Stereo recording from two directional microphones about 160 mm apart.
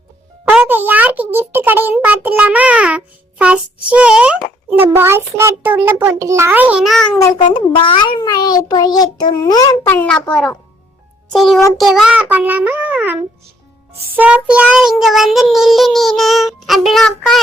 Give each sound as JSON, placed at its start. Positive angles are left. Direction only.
{"t": 0.6, "sound": "a child's voice", "side_deg": -10}
{"t": 7.4, "sound": "a child's voice", "side_deg": 30}
{"t": 9.9, "sound": "a child's voice", "side_deg": 10}
{"t": 11.3, "sound": "child singing", "side_deg": 0}
{"t": 14.2, "sound": "child singing", "side_deg": -10}